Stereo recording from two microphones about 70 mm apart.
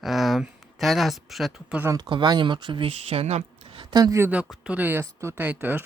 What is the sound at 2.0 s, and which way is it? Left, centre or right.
Speech, right.